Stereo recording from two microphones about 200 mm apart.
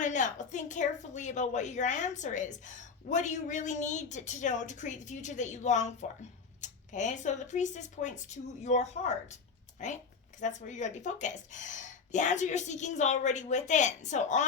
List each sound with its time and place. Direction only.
0.0 s a woman's voice: 40° left (ahead or behind)
10.4 s a woman's voice: 40° left (ahead or behind)